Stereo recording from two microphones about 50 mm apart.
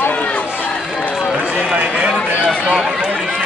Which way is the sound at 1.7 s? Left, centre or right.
Right.